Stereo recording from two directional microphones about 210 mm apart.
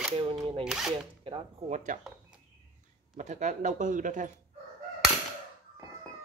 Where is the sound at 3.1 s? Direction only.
35° right (ahead or behind).